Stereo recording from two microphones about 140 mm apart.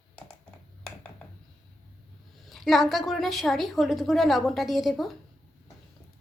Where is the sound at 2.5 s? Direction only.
Centre (ahead or behind).